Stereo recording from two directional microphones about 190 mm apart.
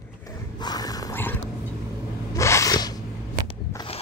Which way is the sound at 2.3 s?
15° left (ahead or behind).